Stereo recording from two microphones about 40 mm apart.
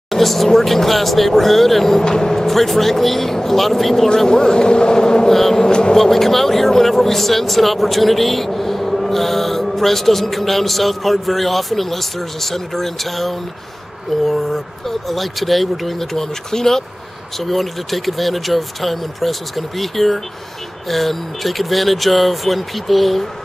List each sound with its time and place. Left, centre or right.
0.1 s speech: centre
4.3 s speech: centre
5.7 s speech: left
5.9 s speech: centre